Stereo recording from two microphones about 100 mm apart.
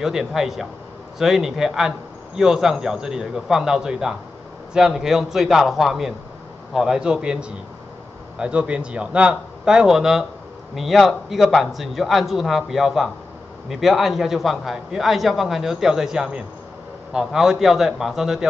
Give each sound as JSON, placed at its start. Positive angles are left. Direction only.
{"t": 0.0, "sound": "a man's voice", "side_deg": -5}